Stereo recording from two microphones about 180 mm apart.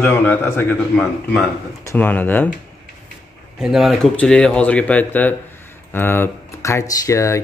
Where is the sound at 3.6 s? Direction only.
Centre (ahead or behind); by 7.4 s 15° left (ahead or behind).